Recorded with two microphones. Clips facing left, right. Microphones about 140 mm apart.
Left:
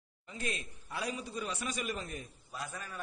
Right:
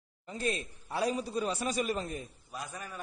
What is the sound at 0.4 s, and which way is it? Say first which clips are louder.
A man's voice: right 6 dB; 35° right (ahead or behind).